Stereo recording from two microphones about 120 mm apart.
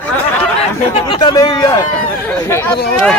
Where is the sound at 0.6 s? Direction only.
55° left (ahead or behind).